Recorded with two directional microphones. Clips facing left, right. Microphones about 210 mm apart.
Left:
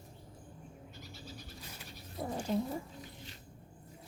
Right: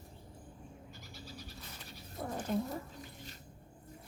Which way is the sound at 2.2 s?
10° left (ahead or behind).